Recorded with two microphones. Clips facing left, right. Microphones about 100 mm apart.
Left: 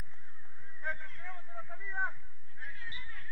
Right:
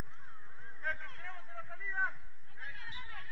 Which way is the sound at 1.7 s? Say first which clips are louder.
Even; 5° left (ahead or behind).